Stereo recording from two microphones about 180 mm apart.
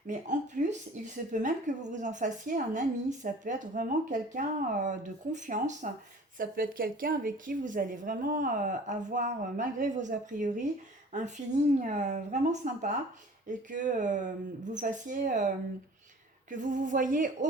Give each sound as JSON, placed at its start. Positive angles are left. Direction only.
{"t": 0.1, "sound": "speech", "side_deg": -45}
{"t": 16.5, "sound": "speech", "side_deg": -45}